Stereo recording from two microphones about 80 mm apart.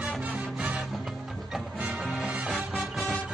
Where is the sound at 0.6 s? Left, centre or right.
Centre.